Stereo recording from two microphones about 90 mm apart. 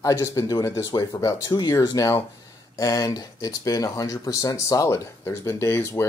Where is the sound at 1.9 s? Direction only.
40° left (ahead or behind).